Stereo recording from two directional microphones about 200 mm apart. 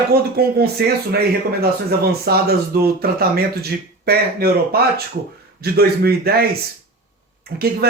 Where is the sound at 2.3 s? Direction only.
50° right (ahead or behind).